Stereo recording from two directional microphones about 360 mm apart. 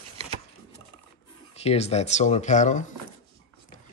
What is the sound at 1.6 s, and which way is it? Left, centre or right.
Speech, centre.